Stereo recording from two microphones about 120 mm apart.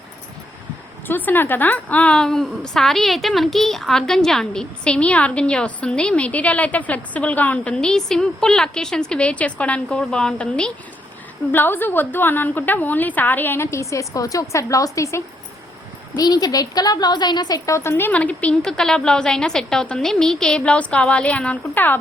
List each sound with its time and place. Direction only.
1.0 s a woman's voice: 15° left (ahead or behind)